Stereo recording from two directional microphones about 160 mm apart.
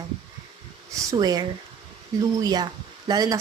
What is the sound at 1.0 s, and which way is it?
Speech, 25° right (ahead or behind).